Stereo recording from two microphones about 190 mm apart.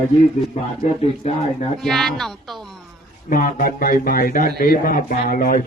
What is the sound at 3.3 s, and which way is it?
A man's voice, 45° left (ahead or behind).